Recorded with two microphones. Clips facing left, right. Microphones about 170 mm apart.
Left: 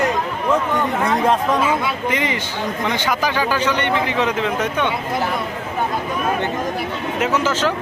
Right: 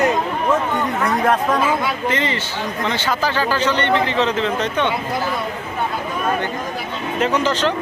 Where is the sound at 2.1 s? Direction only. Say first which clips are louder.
Even; 15° left (ahead or behind).